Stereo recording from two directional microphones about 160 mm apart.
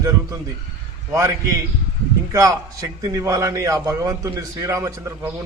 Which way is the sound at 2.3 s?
20° right (ahead or behind).